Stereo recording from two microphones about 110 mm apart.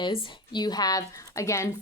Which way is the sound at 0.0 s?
45° left (ahead or behind).